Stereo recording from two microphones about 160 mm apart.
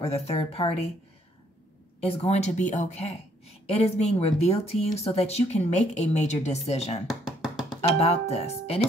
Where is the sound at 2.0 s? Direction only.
40° left (ahead or behind).